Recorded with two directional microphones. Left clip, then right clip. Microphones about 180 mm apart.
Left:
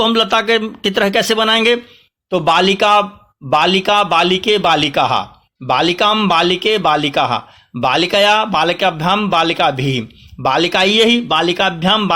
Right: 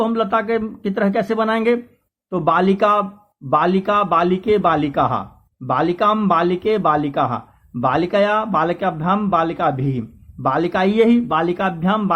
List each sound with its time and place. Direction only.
0.0 s speech: 30° left (ahead or behind)